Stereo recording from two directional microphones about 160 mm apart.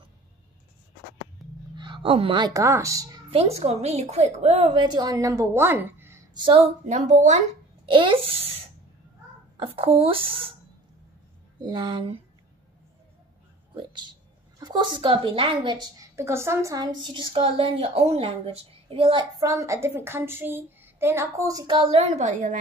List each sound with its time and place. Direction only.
1.4 s a sound: centre (ahead or behind)
1.8 s speech: 30° right (ahead or behind)
3.3 s a woman's voice: 40° right (ahead or behind); by 6.2 s 15° right (ahead or behind)
6.3 s a woman's voice: 30° right (ahead or behind)
6.6 s a woman's voice: 50° right (ahead or behind)
7.8 s a woman's voice: 30° right (ahead or behind)
9.6 s a woman's voice: 35° right (ahead or behind)
11.6 s a woman's voice: 30° right (ahead or behind)
13.7 s a sound: 30° right (ahead or behind)
14.6 s a woman's voice: 25° right (ahead or behind)
16.2 s a woman's voice: 15° right (ahead or behind); by 19.2 s 35° right (ahead or behind)
19.4 s a child's voice: 20° right (ahead or behind)
22.0 s a woman's voice: 50° right (ahead or behind)